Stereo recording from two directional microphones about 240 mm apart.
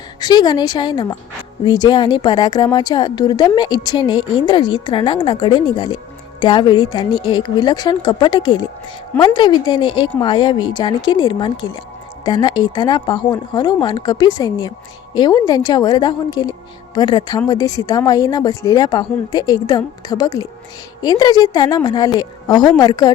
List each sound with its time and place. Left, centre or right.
0.2 s a woman's voice: centre